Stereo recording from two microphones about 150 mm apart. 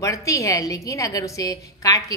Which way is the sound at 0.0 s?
20° left (ahead or behind).